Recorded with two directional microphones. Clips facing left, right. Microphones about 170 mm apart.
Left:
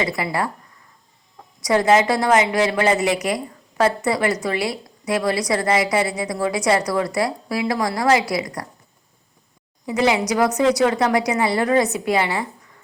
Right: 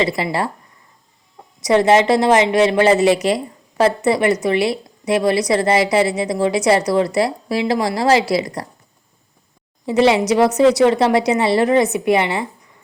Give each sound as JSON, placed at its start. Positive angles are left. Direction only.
{"t": 0.0, "sound": "a woman's voice", "side_deg": -25}
{"t": 1.6, "sound": "a woman's voice", "side_deg": -25}
{"t": 9.8, "sound": "a woman's voice", "side_deg": -25}